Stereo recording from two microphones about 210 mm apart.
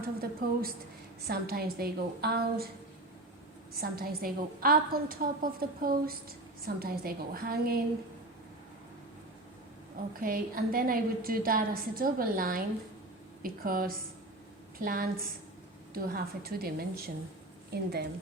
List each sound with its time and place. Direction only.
0.0 s a woman's voice: 45° right (ahead or behind)
3.8 s a woman's voice: 45° right (ahead or behind)
10.2 s a woman's voice: 45° right (ahead or behind)